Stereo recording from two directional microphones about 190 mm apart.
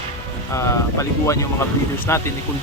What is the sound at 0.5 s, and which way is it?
Speech, 15° left (ahead or behind).